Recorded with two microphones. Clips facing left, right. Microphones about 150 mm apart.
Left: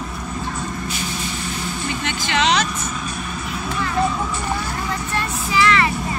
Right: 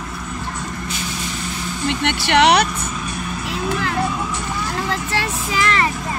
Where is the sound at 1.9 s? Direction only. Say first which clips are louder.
Right 7 dB; 70° right (ahead or behind).